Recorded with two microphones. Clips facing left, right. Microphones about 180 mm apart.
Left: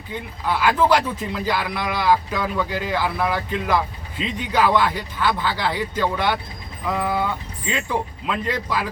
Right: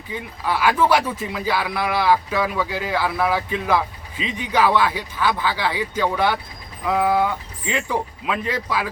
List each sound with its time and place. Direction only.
0.1 s speech: 10° right (ahead or behind)